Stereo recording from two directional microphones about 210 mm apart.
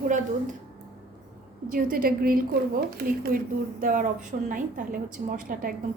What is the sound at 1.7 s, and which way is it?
A woman's voice, 45° right (ahead or behind).